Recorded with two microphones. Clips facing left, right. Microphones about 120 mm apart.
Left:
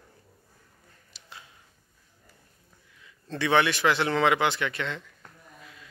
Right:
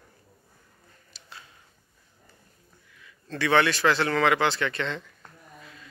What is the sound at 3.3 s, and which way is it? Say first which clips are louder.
A man's voice: right 1 dB; 20° left (ahead or behind).